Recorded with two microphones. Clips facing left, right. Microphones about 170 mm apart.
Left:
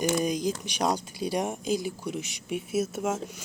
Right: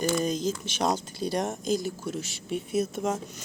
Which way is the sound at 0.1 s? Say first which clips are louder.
Even; 15° left (ahead or behind).